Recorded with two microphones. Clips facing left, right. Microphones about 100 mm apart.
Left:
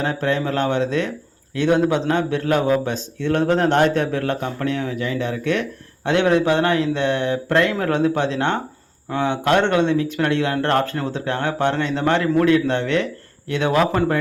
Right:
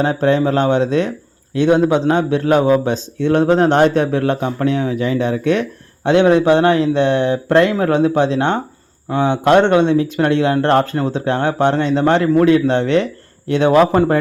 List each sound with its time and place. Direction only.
0.0 s speech: 25° right (ahead or behind)